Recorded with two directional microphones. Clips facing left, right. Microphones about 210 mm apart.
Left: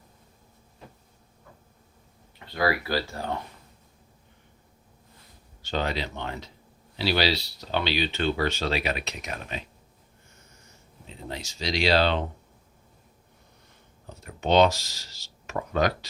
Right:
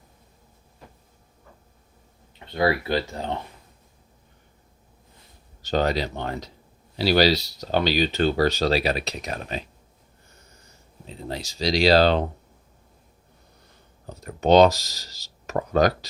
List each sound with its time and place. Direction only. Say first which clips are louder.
2.5 s speech: right 4 dB; 25° right (ahead or behind)
5.6 s speech: right 6 dB; 40° right (ahead or behind)
11.0 s speech: right 4 dB; 35° right (ahead or behind)
14.1 s speech: right 6 dB; 40° right (ahead or behind)